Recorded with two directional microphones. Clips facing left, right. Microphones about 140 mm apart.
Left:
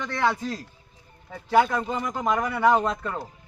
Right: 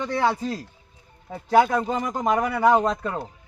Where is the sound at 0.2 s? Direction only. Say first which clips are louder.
Even; 35° right (ahead or behind).